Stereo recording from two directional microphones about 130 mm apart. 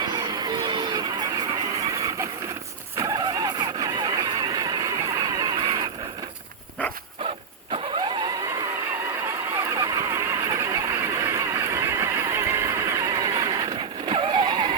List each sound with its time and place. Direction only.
0.1 s a sound: 30° right (ahead or behind)
1.9 s a sound: 25° right (ahead or behind)
3.0 s vehicle: 25° right (ahead or behind)
7.7 s vehicle: 30° right (ahead or behind)
9.6 s vehicle: 25° right (ahead or behind)
14.1 s vehicle: 40° right (ahead or behind)